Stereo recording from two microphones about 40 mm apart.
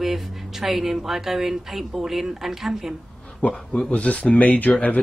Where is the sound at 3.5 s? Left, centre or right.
Left.